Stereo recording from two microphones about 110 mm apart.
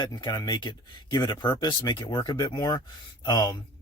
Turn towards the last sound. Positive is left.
turn(degrees=40)  # may be behind; listen again after turning